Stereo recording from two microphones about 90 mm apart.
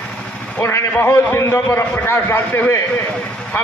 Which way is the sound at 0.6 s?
25° left (ahead or behind).